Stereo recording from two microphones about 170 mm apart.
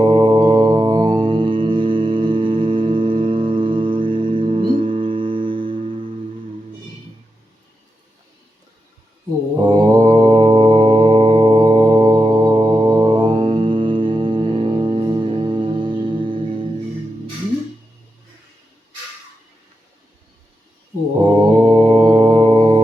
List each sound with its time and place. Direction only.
0.0 s music: 30° right (ahead or behind)
9.6 s mantra: 25° right (ahead or behind)
21.2 s mantra: 30° right (ahead or behind)